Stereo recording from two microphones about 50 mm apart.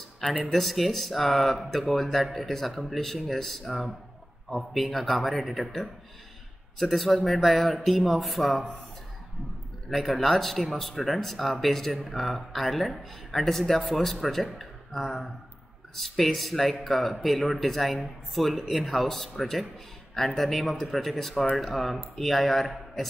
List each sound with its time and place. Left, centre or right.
0.2 s speech: centre
0.5 s speech: centre
9.8 s speech: centre